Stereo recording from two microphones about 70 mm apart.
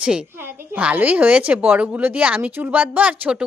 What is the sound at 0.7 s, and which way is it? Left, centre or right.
Speech, right.